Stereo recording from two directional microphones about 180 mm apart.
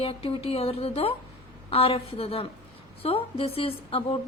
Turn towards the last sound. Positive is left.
turn(degrees=30)  # may be behind; listen again after turning